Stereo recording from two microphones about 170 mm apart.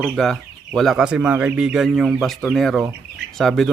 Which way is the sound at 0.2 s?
Centre (ahead or behind).